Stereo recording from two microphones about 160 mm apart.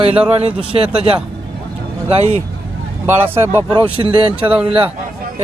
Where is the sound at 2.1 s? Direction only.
40° right (ahead or behind).